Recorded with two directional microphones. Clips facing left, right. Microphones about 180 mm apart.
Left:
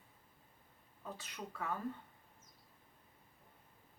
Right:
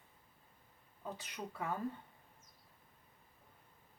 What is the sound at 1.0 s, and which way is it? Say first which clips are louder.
Speech: right 2 dB; 15° right (ahead or behind).